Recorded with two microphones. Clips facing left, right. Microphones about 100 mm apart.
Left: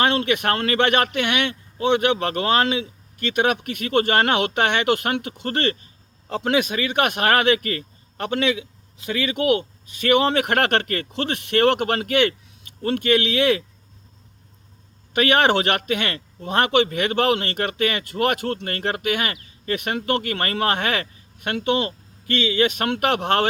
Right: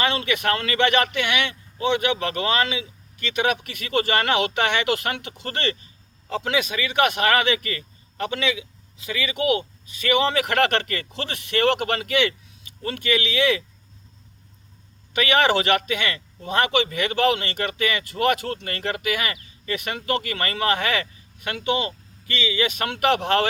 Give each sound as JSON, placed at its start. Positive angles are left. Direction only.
{"t": 0.0, "sound": "speech", "side_deg": 50}
{"t": 15.1, "sound": "speech", "side_deg": 55}